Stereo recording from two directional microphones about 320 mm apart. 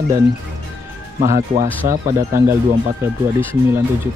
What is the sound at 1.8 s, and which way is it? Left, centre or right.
Speech, centre.